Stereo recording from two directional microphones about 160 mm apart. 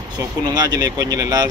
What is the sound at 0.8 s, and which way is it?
Speech, 25° right (ahead or behind).